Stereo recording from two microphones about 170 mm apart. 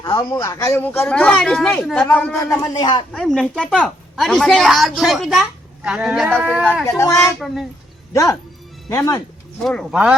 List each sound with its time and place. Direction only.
0.0 s speech: 25° left (ahead or behind); by 2.4 s 5° left (ahead or behind)
2.5 s speech: 25° left (ahead or behind)
3.1 s a woman's voice: centre (ahead or behind)
6.8 s speech: 20° left (ahead or behind)
7.3 s a woman's voice: centre (ahead or behind)
8.1 s speech: 20° left (ahead or behind)
9.6 s a woman's voice: centre (ahead or behind)